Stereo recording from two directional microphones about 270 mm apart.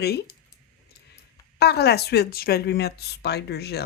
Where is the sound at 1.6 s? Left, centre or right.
Left.